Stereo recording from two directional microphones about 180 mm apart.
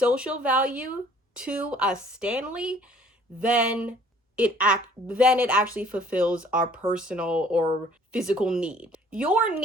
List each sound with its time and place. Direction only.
0.0 s speech: 5° right (ahead or behind)